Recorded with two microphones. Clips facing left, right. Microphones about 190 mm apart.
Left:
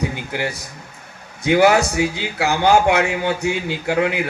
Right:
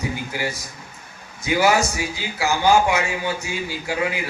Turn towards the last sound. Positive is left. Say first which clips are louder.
# left 5 dB
turn(degrees=60)  # may be behind; listen again after turning